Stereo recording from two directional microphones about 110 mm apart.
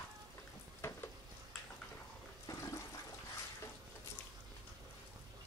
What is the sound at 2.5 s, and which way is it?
Toilet flush, 30° left (ahead or behind).